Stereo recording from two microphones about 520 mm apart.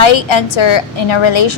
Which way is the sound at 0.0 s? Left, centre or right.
Left.